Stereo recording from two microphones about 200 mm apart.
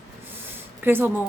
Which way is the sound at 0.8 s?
10° right (ahead or behind).